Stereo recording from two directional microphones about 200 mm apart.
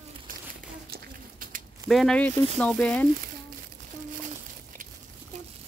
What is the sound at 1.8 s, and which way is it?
Speech, centre (ahead or behind).